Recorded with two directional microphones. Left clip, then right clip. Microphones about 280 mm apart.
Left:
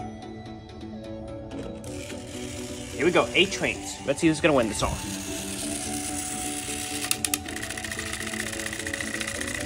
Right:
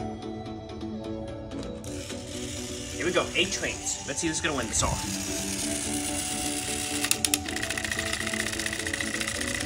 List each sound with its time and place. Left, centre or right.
3.0 s speech: centre
4.8 s music: centre